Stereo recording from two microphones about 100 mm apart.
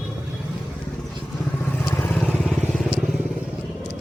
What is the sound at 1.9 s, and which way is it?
Vehicle, 20° left (ahead or behind).